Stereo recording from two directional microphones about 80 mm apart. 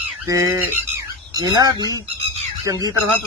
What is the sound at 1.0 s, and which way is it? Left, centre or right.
Bird, right.